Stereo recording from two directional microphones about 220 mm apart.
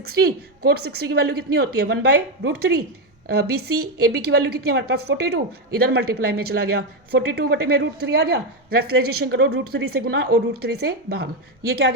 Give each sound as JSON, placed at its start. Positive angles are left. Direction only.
{"t": 0.0, "sound": "a woman's voice", "side_deg": -45}
{"t": 11.6, "sound": "speech", "side_deg": -65}